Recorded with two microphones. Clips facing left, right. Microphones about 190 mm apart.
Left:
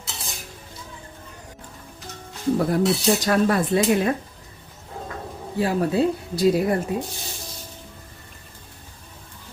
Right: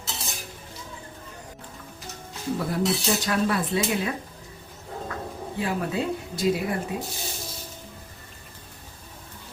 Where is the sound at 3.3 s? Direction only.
45° left (ahead or behind).